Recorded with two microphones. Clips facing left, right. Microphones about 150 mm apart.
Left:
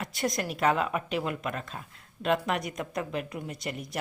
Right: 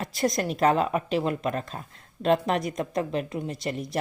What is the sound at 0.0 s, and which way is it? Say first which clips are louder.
Speech: right 5 dB; 35° right (ahead or behind).